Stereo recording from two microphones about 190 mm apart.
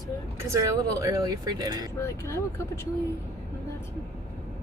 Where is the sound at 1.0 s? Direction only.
15° right (ahead or behind).